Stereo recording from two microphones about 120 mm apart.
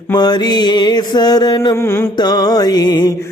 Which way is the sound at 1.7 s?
20° left (ahead or behind).